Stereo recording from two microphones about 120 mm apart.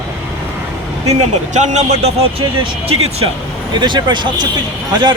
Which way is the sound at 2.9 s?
55° right (ahead or behind).